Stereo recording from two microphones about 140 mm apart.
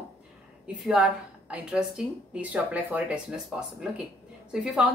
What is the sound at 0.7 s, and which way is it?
A woman's voice, 5° right (ahead or behind).